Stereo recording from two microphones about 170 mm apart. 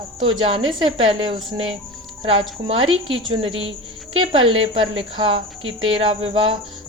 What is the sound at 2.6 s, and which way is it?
A woman's voice, 30° right (ahead or behind).